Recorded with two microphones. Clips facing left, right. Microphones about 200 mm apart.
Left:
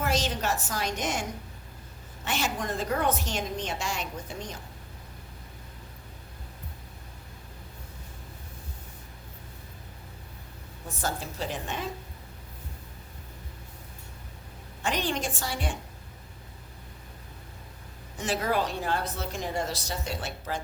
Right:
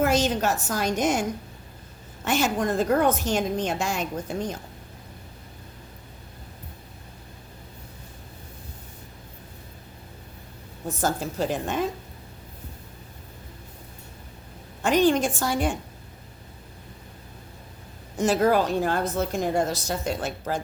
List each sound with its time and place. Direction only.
0.0 s a woman's voice: 45° right (ahead or behind)
2.2 s a woman's voice: 45° right (ahead or behind)
11.0 s a woman's voice: 45° right (ahead or behind)
14.8 s a woman's voice: 45° right (ahead or behind)
18.2 s a woman's voice: 45° right (ahead or behind)